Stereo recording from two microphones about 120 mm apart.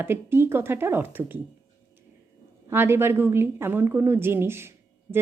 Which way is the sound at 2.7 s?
20° right (ahead or behind).